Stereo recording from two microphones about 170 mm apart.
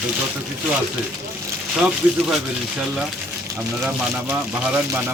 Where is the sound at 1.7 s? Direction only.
Centre (ahead or behind).